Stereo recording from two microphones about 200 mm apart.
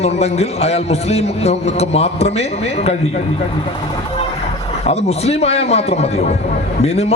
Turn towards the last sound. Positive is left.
turn(degrees=30)  # may be behind; listen again after turning